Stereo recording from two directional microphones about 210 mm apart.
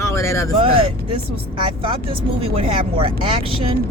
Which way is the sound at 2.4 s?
25° right (ahead or behind).